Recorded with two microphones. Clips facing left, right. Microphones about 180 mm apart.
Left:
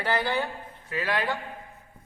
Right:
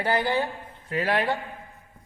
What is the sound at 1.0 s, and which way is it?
Speech, 30° right (ahead or behind).